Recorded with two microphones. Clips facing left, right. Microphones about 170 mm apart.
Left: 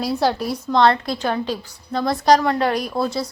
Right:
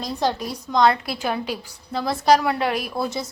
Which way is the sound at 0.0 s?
10° left (ahead or behind).